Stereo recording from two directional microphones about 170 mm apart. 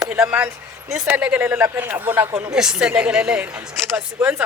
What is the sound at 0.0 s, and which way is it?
Speech, 5° right (ahead or behind).